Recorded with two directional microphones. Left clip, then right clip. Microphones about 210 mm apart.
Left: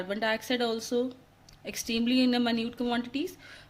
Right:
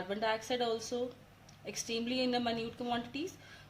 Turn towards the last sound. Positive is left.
turn(degrees=45)  # may be behind; listen again after turning